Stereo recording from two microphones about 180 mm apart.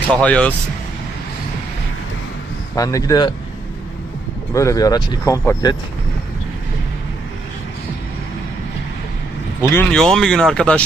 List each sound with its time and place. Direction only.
0.1 s speech: 5° left (ahead or behind)
2.7 s speech: 20° left (ahead or behind)
4.5 s speech: 20° left (ahead or behind)
9.6 s speech: 15° left (ahead or behind)
9.9 s speech: 5° left (ahead or behind)